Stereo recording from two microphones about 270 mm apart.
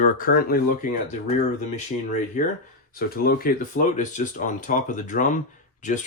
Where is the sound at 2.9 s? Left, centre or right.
Left.